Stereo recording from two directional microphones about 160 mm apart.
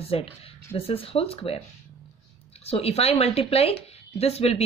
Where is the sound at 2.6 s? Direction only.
40° left (ahead or behind).